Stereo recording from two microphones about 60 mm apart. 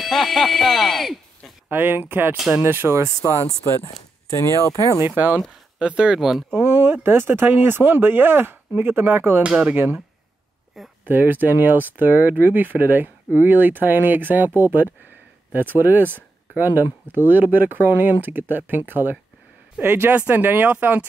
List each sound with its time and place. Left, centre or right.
0.0 s speech: centre
1.7 s speech: right
5.0 s speech: right
5.8 s speech: centre
6.5 s speech: right
9.4 s speech: right
10.8 s speech: centre
11.1 s speech: right